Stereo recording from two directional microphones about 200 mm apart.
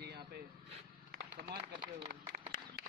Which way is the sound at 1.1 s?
45° right (ahead or behind).